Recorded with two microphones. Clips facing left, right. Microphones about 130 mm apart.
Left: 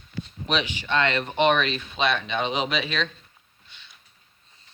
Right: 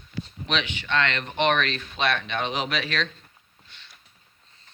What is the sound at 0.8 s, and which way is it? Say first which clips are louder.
Speech: left 3 dB; 10° left (ahead or behind).